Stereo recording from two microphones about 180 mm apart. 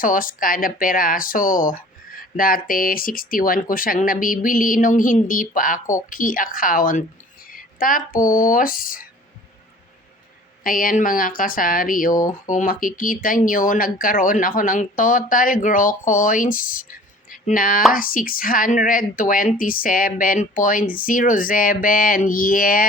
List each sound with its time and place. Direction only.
0.0 s speech: 50° left (ahead or behind)
10.6 s speech: 50° left (ahead or behind)